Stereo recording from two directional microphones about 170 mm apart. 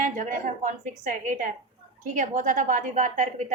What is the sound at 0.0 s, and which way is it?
A woman's voice, 50° right (ahead or behind).